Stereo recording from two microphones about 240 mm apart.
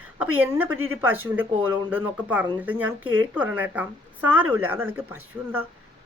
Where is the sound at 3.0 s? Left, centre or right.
Right.